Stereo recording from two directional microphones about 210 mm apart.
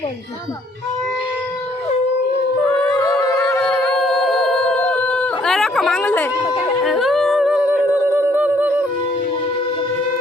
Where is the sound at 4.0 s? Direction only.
Centre (ahead or behind).